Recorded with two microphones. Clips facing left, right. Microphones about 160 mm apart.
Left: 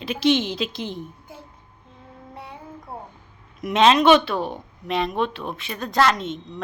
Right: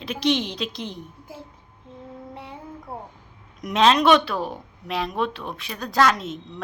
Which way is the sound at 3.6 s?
Centre (ahead or behind).